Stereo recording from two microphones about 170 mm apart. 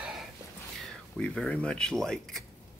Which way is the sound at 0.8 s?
5° left (ahead or behind).